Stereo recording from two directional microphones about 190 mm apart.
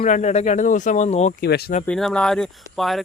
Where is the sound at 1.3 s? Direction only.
55° left (ahead or behind).